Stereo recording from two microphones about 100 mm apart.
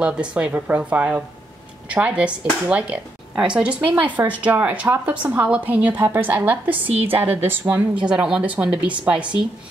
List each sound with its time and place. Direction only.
0.0 s a woman's voice: 10° right (ahead or behind)